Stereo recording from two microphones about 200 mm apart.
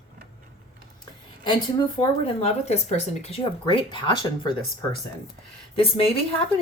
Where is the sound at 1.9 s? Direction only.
30° left (ahead or behind).